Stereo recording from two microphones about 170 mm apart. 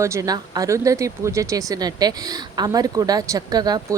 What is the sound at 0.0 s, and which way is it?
Speech, 20° right (ahead or behind).